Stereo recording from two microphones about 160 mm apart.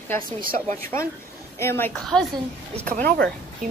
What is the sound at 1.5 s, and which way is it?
Speech, 15° left (ahead or behind).